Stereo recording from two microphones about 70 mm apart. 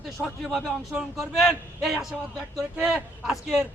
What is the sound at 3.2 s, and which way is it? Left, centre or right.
Speech, centre.